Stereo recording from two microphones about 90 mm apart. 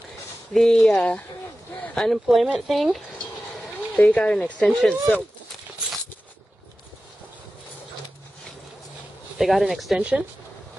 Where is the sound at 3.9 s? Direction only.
10° left (ahead or behind).